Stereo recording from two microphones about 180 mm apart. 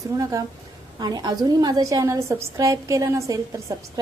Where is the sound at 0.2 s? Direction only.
20° right (ahead or behind).